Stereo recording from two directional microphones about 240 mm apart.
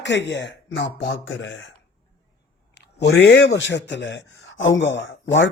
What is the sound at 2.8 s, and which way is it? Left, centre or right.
A man's voice, left.